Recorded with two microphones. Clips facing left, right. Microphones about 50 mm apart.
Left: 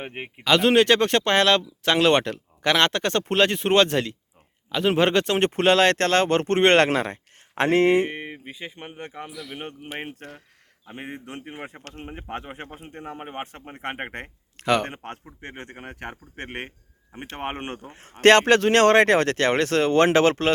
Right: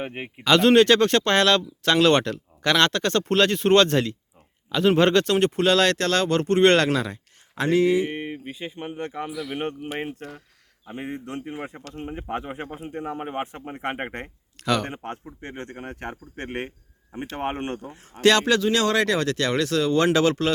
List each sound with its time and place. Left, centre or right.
0.0 s speech: left
0.4 s speech: centre
5.5 s speech: left
5.7 s speech: left
9.3 s speech: centre
10.2 s speech: left
12.9 s speech: centre
13.1 s speech: centre
13.9 s speech: centre
14.6 s speech: left
15.2 s speech: centre
15.7 s speech: centre
17.4 s speech: left